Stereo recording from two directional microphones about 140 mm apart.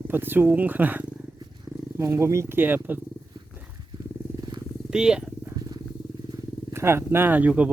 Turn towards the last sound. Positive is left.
turn(degrees=-10)  # may be behind; listen again after turning